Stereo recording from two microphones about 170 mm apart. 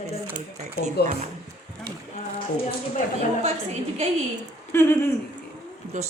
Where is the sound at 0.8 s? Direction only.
40° right (ahead or behind).